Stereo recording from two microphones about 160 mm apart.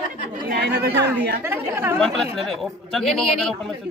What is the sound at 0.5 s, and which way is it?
Chatter, 85° right.